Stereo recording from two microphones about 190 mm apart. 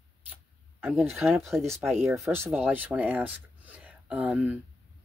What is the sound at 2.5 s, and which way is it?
Speech, 10° right (ahead or behind).